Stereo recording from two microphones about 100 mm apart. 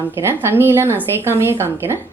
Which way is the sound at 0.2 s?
20° right (ahead or behind).